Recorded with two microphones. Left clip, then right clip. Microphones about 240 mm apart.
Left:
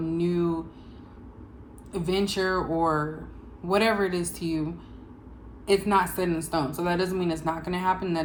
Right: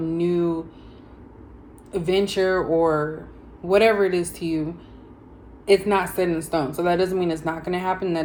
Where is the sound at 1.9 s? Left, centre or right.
Centre.